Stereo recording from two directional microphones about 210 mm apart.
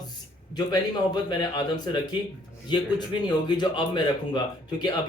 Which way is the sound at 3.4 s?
20° left (ahead or behind).